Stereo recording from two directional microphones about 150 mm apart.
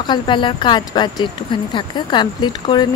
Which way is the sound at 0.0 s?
30° left (ahead or behind).